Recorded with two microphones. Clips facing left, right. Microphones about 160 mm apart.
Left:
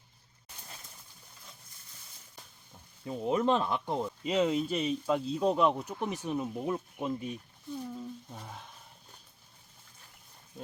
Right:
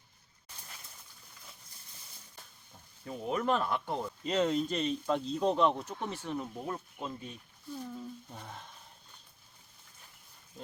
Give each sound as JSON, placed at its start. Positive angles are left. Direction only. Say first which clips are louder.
{"t": 3.1, "sound": "speech", "louder": "left 3 dB", "side_deg": 20}
{"t": 4.2, "sound": "speech", "louder": "left 1 dB", "side_deg": 5}
{"t": 7.9, "sound": "a sound", "louder": "left 2 dB", "side_deg": 5}